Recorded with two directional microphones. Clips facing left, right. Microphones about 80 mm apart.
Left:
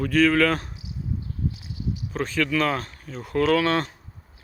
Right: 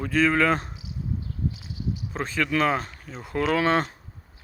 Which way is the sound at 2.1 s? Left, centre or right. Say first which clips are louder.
Left 2 dB; right.